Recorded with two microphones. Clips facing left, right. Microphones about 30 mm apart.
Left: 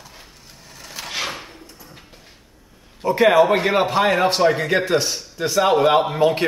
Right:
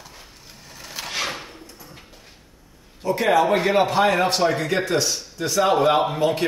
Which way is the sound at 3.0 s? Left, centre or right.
Left.